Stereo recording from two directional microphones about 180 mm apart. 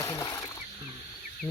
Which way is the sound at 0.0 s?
15° left (ahead or behind).